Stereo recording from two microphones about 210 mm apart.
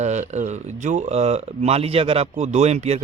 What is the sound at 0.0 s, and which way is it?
Speech, 35° right (ahead or behind).